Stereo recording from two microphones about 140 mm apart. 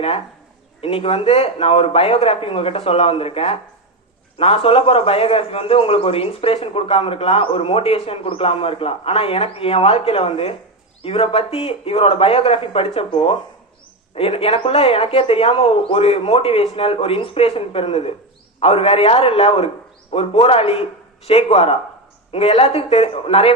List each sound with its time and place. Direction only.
0.8 s a man's voice: 40° left (ahead or behind)